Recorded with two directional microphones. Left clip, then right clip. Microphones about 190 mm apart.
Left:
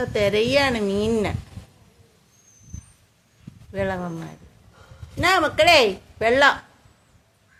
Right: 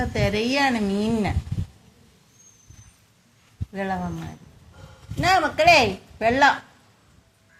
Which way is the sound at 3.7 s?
20° left (ahead or behind).